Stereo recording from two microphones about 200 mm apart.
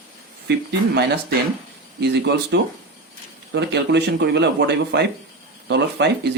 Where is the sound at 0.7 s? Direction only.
55° right (ahead or behind).